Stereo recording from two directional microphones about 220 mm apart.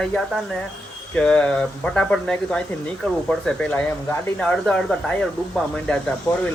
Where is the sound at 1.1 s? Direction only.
5° left (ahead or behind).